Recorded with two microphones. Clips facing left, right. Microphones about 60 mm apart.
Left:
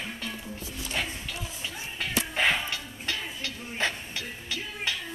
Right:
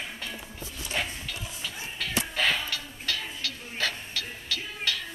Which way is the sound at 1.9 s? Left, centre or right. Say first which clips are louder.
Left 1 dB; left.